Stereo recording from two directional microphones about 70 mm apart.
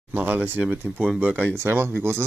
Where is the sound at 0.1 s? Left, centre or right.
Right.